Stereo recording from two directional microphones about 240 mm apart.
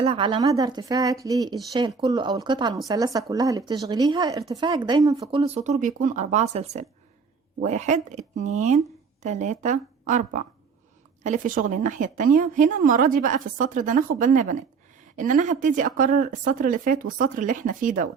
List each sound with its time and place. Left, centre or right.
0.0 s speech: right
5.3 s a woman's voice: right